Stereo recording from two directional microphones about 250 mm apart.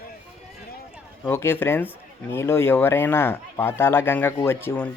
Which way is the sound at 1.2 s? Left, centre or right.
Centre.